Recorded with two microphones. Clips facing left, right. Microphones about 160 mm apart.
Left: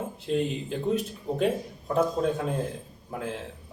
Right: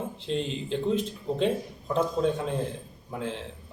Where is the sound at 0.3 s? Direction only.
5° left (ahead or behind).